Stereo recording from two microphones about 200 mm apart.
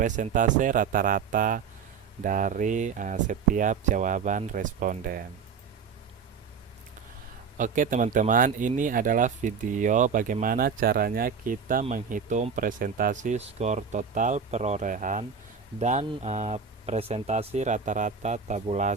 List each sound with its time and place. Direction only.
0.0 s speech: 40° right (ahead or behind)
7.6 s speech: 40° right (ahead or behind)